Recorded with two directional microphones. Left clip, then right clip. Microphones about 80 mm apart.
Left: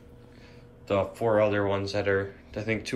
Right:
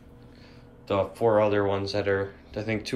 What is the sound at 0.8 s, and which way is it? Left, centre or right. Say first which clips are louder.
Speech: right 2 dB; right.